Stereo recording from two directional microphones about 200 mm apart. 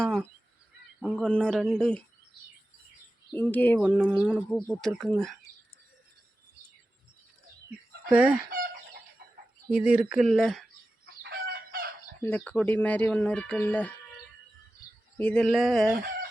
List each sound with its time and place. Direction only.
0.0 s speech: centre (ahead or behind)
3.3 s speech: 10° left (ahead or behind)
3.8 s speech: 5° right (ahead or behind)
8.1 s speech: 5° right (ahead or behind)
8.4 s chicken: 45° right (ahead or behind)
9.7 s speech: 5° right (ahead or behind)
11.0 s chicken: 55° right (ahead or behind)
12.2 s speech: 5° left (ahead or behind)
15.2 s speech: 5° left (ahead or behind)